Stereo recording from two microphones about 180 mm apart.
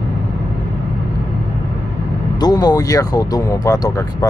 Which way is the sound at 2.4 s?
20° left (ahead or behind).